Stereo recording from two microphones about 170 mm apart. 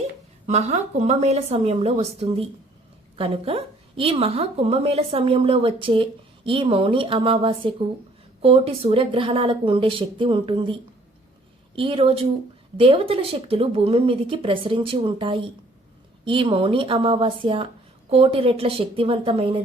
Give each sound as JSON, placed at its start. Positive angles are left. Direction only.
{"t": 0.4, "sound": "a woman's voice", "side_deg": -40}